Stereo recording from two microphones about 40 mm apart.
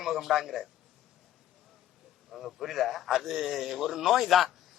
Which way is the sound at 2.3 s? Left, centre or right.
Centre.